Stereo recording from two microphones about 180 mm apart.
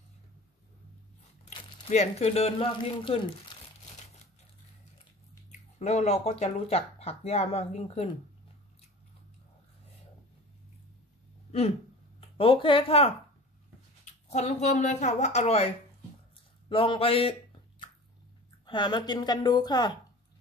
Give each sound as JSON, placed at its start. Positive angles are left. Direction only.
{"t": 1.4, "sound": "speech", "side_deg": 40}
{"t": 5.5, "sound": "speech", "side_deg": 40}
{"t": 12.4, "sound": "speech", "side_deg": 30}
{"t": 16.6, "sound": "a sound", "side_deg": 30}
{"t": 18.7, "sound": "speech", "side_deg": 25}